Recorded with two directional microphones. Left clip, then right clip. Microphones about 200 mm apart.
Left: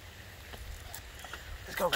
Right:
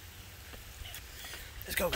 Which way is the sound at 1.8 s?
25° right (ahead or behind).